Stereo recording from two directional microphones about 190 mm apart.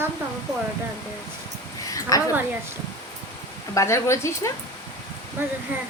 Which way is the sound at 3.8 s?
15° left (ahead or behind).